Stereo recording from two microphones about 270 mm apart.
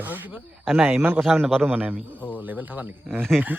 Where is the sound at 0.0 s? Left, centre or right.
Centre.